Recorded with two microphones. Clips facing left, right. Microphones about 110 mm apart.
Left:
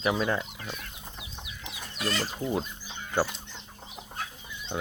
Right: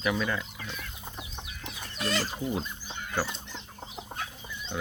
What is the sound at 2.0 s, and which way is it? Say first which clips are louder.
Speech: even; centre (ahead or behind).